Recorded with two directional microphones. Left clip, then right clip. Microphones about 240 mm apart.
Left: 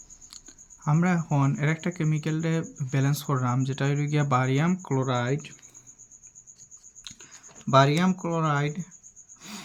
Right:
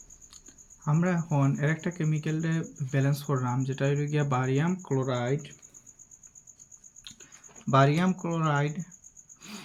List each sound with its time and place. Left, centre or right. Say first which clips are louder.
0.9 s speech: left 3 dB; left
7.7 s speech: left 3 dB; centre